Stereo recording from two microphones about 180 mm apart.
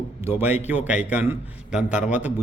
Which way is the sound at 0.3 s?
10° right (ahead or behind).